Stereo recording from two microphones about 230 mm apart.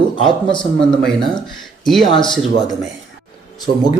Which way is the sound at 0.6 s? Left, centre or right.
Centre.